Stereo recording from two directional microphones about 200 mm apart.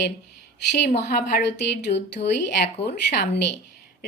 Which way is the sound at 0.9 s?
55° left (ahead or behind).